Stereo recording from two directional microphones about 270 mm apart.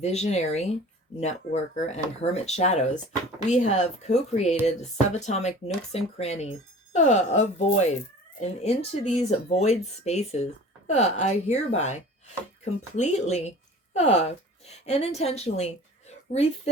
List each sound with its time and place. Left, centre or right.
0.0 s a woman's voice: left